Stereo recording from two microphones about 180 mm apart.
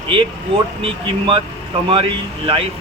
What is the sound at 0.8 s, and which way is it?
Speech, 30° right (ahead or behind).